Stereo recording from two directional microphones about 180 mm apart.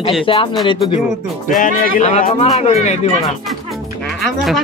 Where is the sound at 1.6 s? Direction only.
45° left (ahead or behind).